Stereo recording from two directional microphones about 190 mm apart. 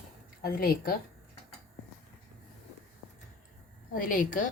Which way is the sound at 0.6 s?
50° left (ahead or behind).